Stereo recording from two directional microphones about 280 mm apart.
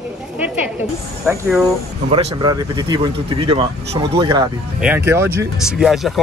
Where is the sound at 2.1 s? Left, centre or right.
Centre.